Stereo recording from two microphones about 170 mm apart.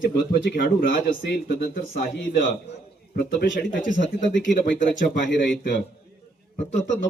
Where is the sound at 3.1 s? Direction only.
70° left (ahead or behind).